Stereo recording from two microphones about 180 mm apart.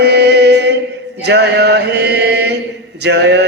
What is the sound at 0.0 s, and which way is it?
Chant, 70° right (ahead or behind).